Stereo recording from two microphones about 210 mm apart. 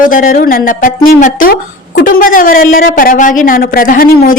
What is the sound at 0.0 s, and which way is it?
A woman's voice, 40° left (ahead or behind).